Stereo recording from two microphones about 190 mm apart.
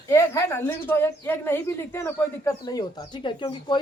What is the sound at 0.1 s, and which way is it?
Speech, 15° left (ahead or behind).